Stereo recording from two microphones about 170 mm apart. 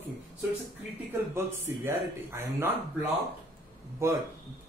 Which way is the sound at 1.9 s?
15° right (ahead or behind).